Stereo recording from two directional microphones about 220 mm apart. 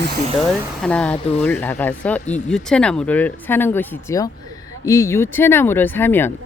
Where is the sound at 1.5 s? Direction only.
10° left (ahead or behind).